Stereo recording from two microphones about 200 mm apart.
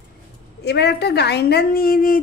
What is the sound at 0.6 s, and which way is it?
A woman's voice, 55° left (ahead or behind).